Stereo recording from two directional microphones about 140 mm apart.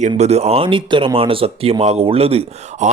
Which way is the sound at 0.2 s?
50° right (ahead or behind).